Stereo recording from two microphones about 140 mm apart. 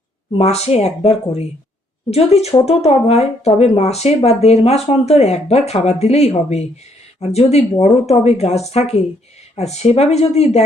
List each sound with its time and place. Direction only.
0.3 s speech: 50° left (ahead or behind)